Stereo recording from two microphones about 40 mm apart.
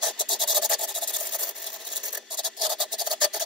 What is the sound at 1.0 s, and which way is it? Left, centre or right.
Engine, centre.